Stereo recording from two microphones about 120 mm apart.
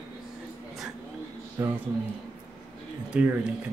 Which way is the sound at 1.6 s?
20° right (ahead or behind).